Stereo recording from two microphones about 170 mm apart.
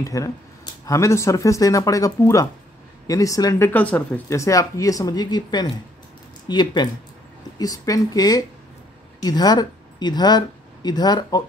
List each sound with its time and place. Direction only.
0.0 s speech: 20° left (ahead or behind)